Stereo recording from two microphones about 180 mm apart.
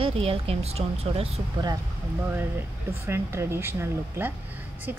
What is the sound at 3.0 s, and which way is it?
Speech, 15° right (ahead or behind).